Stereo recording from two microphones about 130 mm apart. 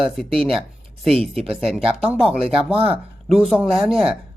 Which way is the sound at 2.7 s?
45° right (ahead or behind).